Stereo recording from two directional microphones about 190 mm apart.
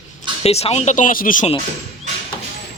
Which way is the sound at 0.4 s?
35° left (ahead or behind).